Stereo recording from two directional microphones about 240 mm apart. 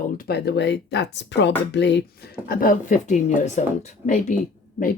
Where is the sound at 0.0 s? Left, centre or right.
Left.